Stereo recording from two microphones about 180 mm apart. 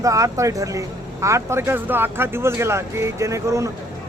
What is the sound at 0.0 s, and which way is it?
A man's voice, 20° right (ahead or behind).